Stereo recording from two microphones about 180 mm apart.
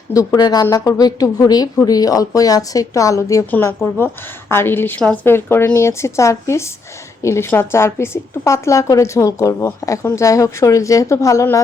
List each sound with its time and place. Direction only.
0.1 s a woman's voice: 20° left (ahead or behind)